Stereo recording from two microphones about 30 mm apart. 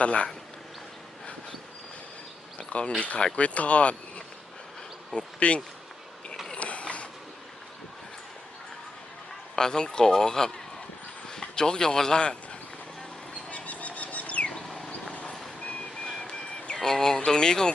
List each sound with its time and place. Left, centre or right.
0.0 s speech: left
2.6 s a sound: left
3.3 s speech: left
5.1 s speech: left
6.6 s mechanisms: left
9.6 s speech: left
12.2 s speech: left
13.5 s a sound: left
14.8 s vehicle: left
16.7 s speech: centre